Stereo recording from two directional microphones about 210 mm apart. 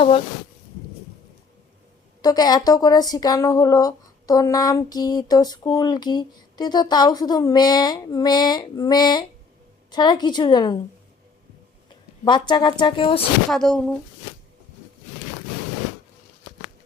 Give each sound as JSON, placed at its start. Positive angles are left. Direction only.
{"t": 2.2, "sound": "speech", "side_deg": 20}
{"t": 12.2, "sound": "speech", "side_deg": 20}
{"t": 13.5, "sound": "speech", "side_deg": 0}